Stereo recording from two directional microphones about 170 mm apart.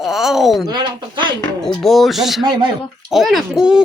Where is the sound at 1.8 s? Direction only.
Centre (ahead or behind).